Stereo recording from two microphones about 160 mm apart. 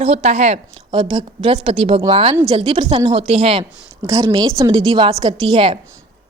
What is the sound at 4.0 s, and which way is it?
A woman's voice, 20° right (ahead or behind).